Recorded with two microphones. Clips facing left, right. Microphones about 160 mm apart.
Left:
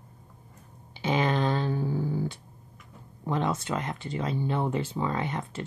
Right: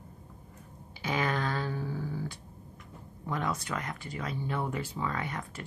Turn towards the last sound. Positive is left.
turn(degrees=25)  # may be behind; listen again after turning